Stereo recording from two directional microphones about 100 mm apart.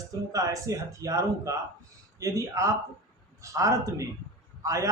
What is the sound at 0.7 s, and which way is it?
Speech, 35° right (ahead or behind).